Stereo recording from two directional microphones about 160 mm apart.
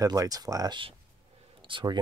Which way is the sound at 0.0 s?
20° right (ahead or behind).